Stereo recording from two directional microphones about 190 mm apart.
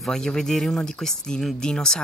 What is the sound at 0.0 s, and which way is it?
Speech, 5° left (ahead or behind).